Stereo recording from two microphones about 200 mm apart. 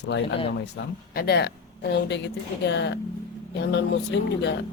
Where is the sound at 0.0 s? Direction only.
60° left (ahead or behind).